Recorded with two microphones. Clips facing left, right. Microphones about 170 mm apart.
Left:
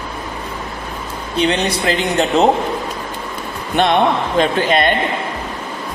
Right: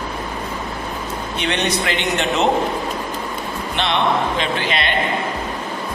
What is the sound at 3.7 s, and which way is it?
Speech, 50° left (ahead or behind).